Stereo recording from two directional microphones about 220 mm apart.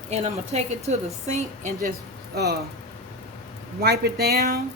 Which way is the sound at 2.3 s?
50° right (ahead or behind).